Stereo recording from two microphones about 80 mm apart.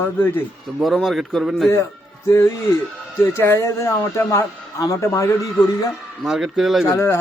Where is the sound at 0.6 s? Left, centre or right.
Centre.